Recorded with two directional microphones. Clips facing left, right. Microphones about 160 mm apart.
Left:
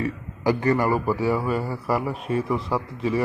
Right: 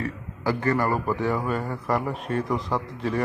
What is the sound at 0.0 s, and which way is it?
A man's voice, 15° left (ahead or behind).